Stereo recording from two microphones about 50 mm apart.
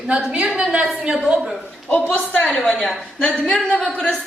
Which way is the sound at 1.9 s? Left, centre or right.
Left.